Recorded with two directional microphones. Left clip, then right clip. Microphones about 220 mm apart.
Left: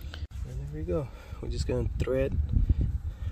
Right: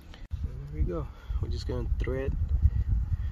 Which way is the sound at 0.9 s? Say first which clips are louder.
Left 5 dB; 25° left (ahead or behind).